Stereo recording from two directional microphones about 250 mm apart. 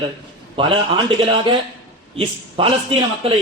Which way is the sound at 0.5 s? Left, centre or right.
Right.